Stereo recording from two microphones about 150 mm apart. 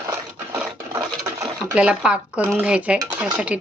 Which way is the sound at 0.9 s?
20° right (ahead or behind).